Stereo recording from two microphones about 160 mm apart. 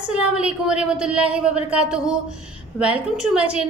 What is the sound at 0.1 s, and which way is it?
A woman's voice, 5° right (ahead or behind).